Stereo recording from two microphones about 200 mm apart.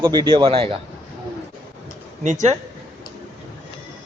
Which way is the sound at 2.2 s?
40° right (ahead or behind).